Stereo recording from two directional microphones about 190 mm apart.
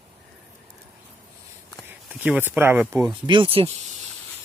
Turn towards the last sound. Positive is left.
turn(degrees=-30)  # may be behind; listen again after turning